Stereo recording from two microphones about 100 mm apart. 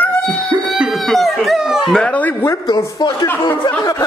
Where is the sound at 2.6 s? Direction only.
45° left (ahead or behind).